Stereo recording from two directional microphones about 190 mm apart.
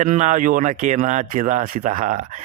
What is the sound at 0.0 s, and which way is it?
Speech, 40° right (ahead or behind).